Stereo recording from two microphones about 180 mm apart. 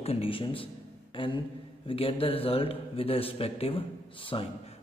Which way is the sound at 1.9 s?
30° left (ahead or behind).